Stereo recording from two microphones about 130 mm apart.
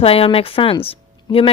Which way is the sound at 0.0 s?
45° left (ahead or behind).